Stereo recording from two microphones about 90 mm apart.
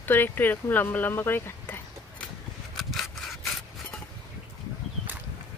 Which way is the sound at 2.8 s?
Centre (ahead or behind).